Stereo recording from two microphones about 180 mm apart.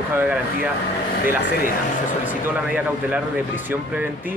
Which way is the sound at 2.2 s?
10° right (ahead or behind).